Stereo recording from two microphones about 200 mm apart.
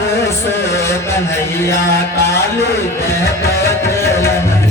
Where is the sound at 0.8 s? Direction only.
15° left (ahead or behind).